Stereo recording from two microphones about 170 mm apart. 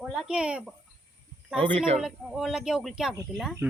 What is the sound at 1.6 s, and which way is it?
Speech, 30° right (ahead or behind).